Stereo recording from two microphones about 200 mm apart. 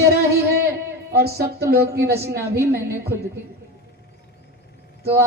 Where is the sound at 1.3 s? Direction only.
50° right (ahead or behind).